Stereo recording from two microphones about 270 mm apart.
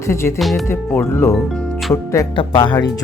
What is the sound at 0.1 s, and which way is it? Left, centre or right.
Speech, centre.